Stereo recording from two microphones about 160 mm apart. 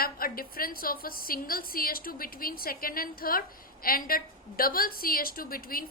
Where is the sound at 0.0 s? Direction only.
65° left (ahead or behind).